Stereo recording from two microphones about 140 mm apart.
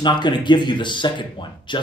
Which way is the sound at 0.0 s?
35° left (ahead or behind).